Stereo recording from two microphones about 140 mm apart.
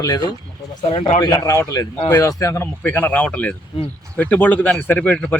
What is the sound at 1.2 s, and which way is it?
Speech, 25° left (ahead or behind).